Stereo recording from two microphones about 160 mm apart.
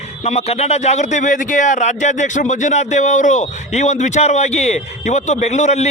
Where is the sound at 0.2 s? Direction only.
45° left (ahead or behind).